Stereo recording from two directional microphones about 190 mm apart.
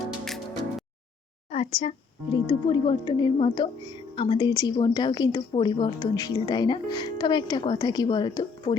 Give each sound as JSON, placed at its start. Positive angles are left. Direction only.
{"t": 1.5, "sound": "a woman's voice", "side_deg": 30}